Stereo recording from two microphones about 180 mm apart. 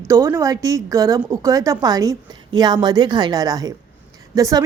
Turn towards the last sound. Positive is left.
turn(degrees=-20)  # may be behind; listen again after turning